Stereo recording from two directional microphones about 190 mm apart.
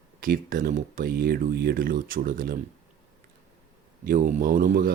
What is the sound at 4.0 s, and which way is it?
Speech, 45° right (ahead or behind).